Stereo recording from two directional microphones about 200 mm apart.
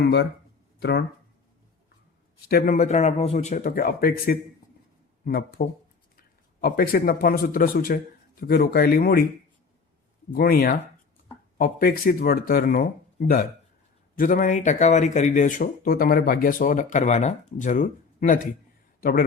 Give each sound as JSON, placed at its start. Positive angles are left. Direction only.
{"t": 0.0, "sound": "speech", "side_deg": 55}
{"t": 2.5, "sound": "speech", "side_deg": 45}
{"t": 10.3, "sound": "speech", "side_deg": 50}